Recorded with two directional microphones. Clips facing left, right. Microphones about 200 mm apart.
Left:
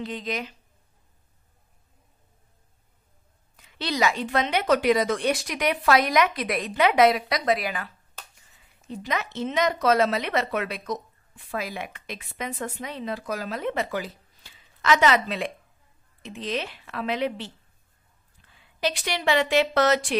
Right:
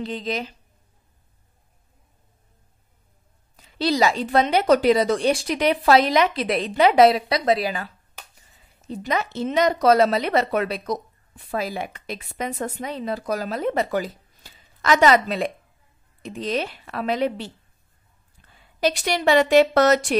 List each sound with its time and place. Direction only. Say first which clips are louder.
0.0 s a woman's voice: right 3 dB; 30° right (ahead or behind)
3.5 s a woman's voice: right 6 dB; 35° right (ahead or behind)
18.6 s a woman's voice: right 5 dB; 40° right (ahead or behind)